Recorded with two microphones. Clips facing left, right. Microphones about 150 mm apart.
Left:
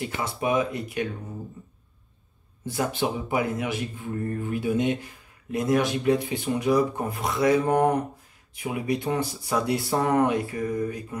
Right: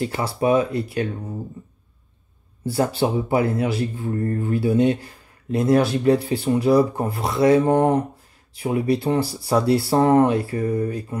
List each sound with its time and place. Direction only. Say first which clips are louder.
0.0 s speech: right 6 dB; 35° right (ahead or behind)
2.6 s speech: right 6 dB; 35° right (ahead or behind)